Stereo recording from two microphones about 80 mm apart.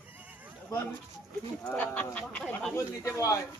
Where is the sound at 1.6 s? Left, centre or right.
Centre.